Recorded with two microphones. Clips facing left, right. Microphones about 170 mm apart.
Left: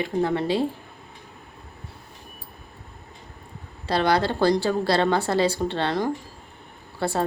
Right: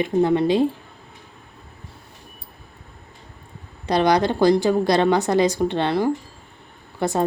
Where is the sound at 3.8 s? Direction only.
15° right (ahead or behind).